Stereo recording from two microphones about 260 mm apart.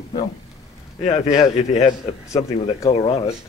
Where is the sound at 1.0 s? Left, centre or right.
Left.